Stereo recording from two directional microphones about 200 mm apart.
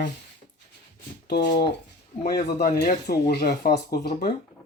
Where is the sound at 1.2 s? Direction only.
55° left (ahead or behind).